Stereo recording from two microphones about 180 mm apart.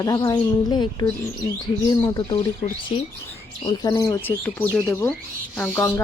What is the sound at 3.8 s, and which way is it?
Speech, 20° left (ahead or behind).